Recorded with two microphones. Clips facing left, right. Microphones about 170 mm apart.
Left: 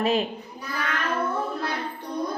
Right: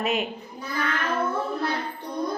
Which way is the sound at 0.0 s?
30° left (ahead or behind).